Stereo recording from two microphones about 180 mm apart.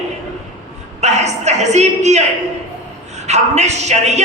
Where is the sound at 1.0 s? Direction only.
40° right (ahead or behind).